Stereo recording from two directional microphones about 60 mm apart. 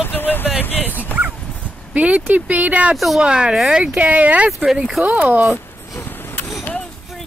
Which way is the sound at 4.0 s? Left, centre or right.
Right.